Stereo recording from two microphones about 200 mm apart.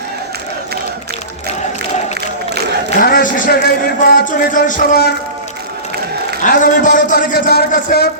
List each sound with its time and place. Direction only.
3.0 s a man's voice: 45° left (ahead or behind)
6.4 s a man's voice: 40° left (ahead or behind)